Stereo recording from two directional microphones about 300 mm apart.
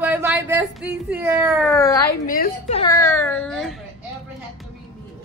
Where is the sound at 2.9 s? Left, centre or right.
Centre.